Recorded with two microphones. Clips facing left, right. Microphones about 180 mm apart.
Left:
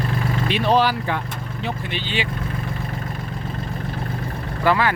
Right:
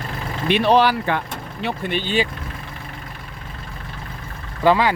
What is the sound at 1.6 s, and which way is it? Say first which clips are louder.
Speech: right 4 dB; 50° right (ahead or behind).